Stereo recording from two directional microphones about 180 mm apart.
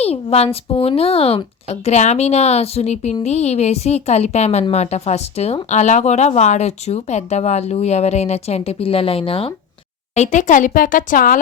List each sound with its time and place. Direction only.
0.0 s speech: 35° left (ahead or behind)
10.2 s a woman's voice: 45° left (ahead or behind)